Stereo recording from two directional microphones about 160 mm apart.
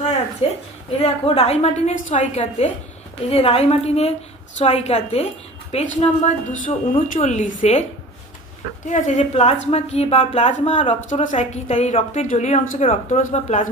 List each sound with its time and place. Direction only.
0.4 s a woman's voice: 40° left (ahead or behind)
8.8 s a woman's voice: 50° left (ahead or behind)